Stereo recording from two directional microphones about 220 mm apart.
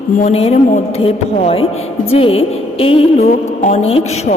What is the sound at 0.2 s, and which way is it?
A woman's voice, 30° left (ahead or behind).